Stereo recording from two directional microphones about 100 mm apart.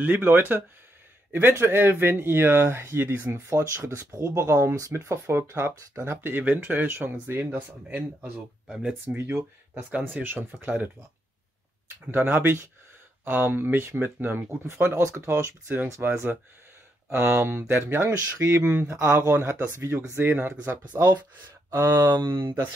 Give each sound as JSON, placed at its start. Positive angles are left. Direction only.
{"t": 0.0, "sound": "speech", "side_deg": -20}
{"t": 8.6, "sound": "speech", "side_deg": -5}
{"t": 9.0, "sound": "speech", "side_deg": -20}
{"t": 12.1, "sound": "speech", "side_deg": -20}
{"t": 22.1, "sound": "speech", "side_deg": -20}
{"t": 22.4, "sound": "speech", "side_deg": -50}